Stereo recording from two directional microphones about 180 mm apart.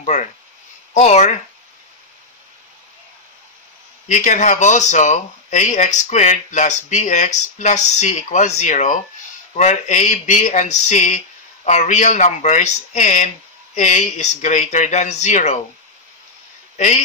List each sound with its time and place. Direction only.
0.0 s speech: 45° left (ahead or behind)
4.1 s speech: 45° left (ahead or behind)
16.7 s a man's voice: 40° left (ahead or behind)